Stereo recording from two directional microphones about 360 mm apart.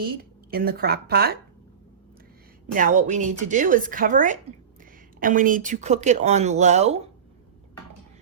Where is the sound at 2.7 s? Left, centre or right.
Right.